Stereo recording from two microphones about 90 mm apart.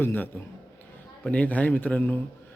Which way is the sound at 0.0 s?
20° left (ahead or behind).